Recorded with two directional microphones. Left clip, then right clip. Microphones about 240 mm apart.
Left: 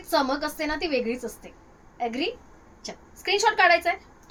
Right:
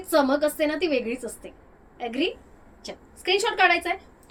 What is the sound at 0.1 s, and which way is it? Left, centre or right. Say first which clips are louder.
A woman's voice: right 3 dB; centre.